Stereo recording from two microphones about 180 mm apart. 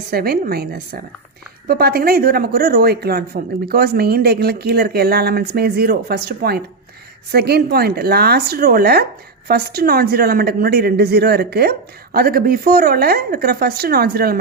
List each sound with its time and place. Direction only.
0.1 s speech: 60° right (ahead or behind)